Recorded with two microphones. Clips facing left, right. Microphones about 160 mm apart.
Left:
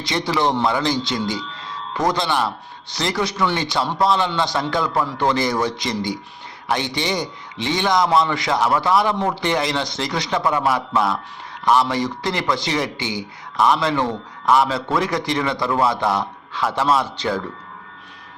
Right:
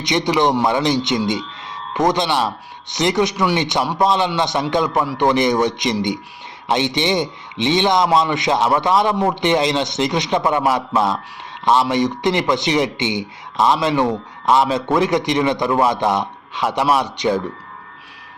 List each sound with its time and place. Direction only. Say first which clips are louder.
0.0 s a man's voice: right 4 dB; 20° right (ahead or behind)